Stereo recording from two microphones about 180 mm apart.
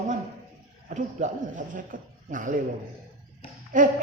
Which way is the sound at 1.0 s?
45° right (ahead or behind).